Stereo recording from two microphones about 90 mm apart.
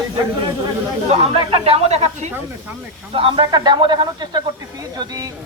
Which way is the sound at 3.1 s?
85° right.